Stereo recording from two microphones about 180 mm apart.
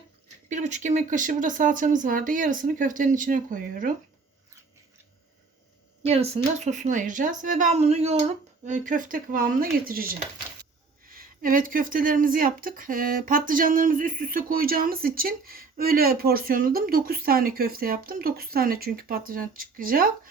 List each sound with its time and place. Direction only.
0.4 s speech: 40° right (ahead or behind)
6.0 s speech: 35° right (ahead or behind); by 20.1 s 50° right (ahead or behind)